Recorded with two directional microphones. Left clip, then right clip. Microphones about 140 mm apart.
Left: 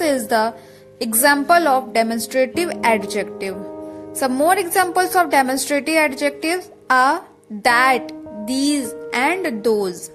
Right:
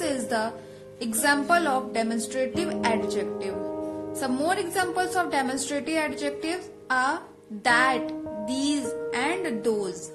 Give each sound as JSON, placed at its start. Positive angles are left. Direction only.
{"t": 0.0, "sound": "music", "side_deg": 60}
{"t": 0.9, "sound": "a woman's voice", "side_deg": 55}